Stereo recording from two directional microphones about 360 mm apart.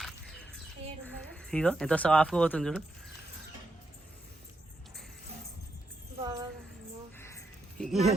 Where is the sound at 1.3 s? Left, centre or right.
Centre.